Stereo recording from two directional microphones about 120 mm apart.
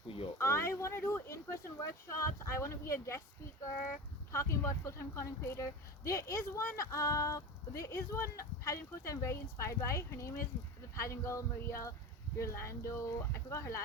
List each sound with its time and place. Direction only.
0.3 s speech: 20° left (ahead or behind)
4.3 s speech: 25° left (ahead or behind)